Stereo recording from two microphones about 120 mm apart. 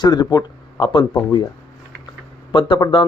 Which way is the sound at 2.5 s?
40° left (ahead or behind).